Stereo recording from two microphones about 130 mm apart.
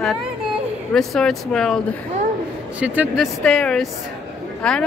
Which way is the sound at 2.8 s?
10° right (ahead or behind).